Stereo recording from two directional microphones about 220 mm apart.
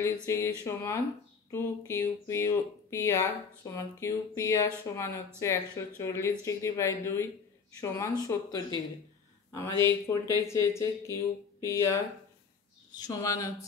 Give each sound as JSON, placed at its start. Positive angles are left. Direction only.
{"t": 0.3, "sound": "speech", "side_deg": 10}
{"t": 13.0, "sound": "speech", "side_deg": 15}